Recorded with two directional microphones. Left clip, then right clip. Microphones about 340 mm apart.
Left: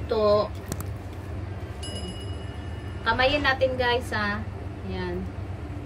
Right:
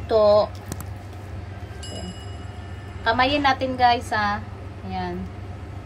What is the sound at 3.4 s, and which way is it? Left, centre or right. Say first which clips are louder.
Speech: right 4 dB; centre.